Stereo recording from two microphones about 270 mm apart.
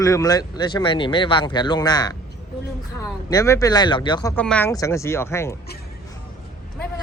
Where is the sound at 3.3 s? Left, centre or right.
Centre.